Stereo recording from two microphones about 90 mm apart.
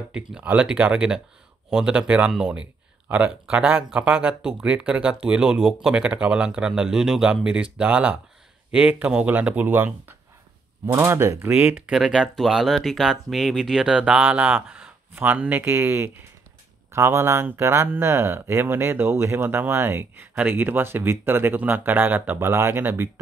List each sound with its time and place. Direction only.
0.1 s speech: 10° right (ahead or behind)
10.9 s speech: 25° right (ahead or behind)
11.8 s speech: 10° right (ahead or behind)
22.5 s speech: 30° right (ahead or behind)